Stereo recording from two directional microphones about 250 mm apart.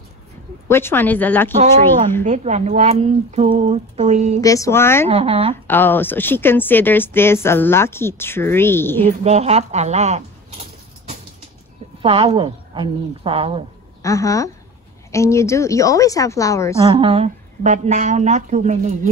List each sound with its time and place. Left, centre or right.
0.7 s speech: centre
2.2 s speech: right
4.4 s speech: centre
5.0 s speech: right
5.7 s speech: centre
9.2 s a sound: right
12.0 s speech: right
14.0 s speech: centre
16.8 s speech: right